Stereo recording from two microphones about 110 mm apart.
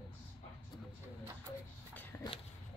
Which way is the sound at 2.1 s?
20° left (ahead or behind).